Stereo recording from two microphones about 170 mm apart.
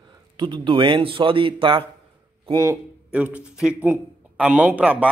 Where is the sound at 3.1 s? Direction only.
10° right (ahead or behind).